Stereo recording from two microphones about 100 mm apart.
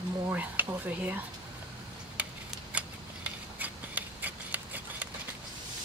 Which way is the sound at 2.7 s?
15° right (ahead or behind).